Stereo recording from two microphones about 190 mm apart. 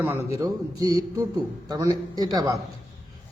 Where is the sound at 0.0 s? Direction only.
15° right (ahead or behind).